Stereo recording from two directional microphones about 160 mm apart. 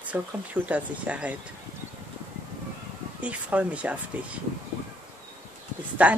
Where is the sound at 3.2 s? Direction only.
10° right (ahead or behind).